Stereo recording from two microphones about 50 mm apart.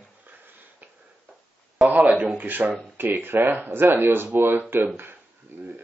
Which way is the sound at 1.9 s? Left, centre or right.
Right.